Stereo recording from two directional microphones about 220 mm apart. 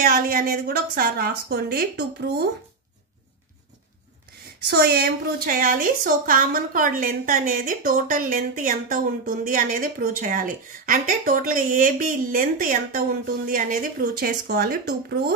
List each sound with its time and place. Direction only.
0.0 s a woman's voice: 40° right (ahead or behind)
4.6 s a woman's voice: 45° right (ahead or behind)